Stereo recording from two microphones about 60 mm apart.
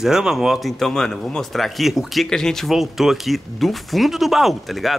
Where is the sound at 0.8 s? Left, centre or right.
Centre.